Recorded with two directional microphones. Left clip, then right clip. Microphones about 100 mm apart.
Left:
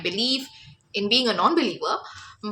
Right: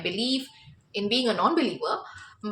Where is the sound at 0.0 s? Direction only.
30° left (ahead or behind).